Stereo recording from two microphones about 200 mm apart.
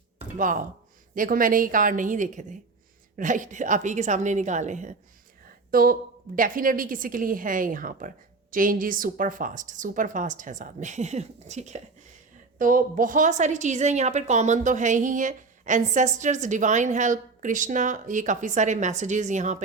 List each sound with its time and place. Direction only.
0.3 s a woman's voice: 40° right (ahead or behind)